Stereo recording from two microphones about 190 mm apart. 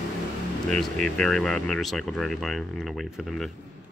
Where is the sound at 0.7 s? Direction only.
5° left (ahead or behind).